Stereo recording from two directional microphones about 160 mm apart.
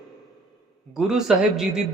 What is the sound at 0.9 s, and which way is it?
Speech, 5° right (ahead or behind).